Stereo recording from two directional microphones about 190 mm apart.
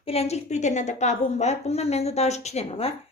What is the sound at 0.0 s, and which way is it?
A woman's voice, 30° left (ahead or behind).